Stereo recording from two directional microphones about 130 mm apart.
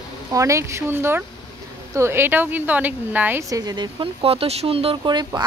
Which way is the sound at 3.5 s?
30° right (ahead or behind).